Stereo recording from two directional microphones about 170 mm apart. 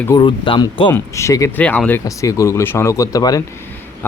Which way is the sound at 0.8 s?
15° left (ahead or behind).